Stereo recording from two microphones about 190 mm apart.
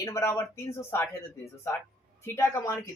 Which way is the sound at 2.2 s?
10° left (ahead or behind).